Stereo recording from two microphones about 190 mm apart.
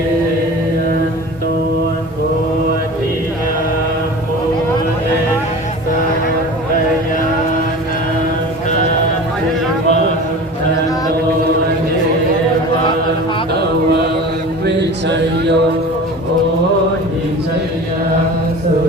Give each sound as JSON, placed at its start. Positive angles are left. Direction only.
{"t": 14.6, "sound": "mantra", "side_deg": -65}